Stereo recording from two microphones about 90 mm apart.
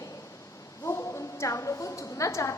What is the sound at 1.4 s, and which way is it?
A woman's voice, 35° left (ahead or behind).